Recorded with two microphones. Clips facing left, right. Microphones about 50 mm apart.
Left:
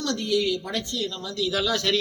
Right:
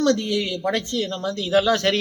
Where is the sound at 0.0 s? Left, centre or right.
Right.